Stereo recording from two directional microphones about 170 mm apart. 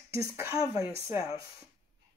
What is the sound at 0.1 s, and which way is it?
Speech, 15° right (ahead or behind).